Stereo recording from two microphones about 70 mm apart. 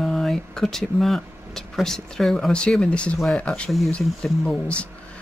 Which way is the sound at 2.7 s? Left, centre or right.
Centre.